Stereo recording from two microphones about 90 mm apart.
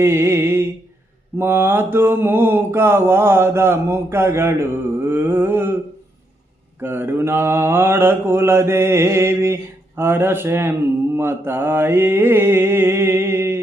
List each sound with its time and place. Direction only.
0.0 s a sound: 30° right (ahead or behind)
1.4 s mantra: 25° right (ahead or behind)
6.7 s mantra: 25° right (ahead or behind)